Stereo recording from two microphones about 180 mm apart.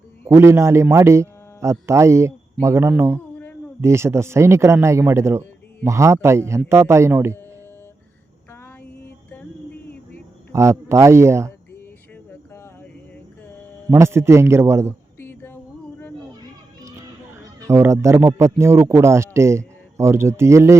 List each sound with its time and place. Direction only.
0.3 s speech: 15° right (ahead or behind)
10.5 s speech: 15° right (ahead or behind)
12.3 s a sound: 10° left (ahead or behind)
13.9 s speech: 15° right (ahead or behind)
15.2 s a sound: 10° left (ahead or behind)
17.3 s speech: 15° right (ahead or behind)